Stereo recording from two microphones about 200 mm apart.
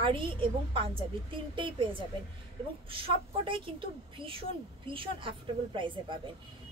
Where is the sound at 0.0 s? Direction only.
25° right (ahead or behind).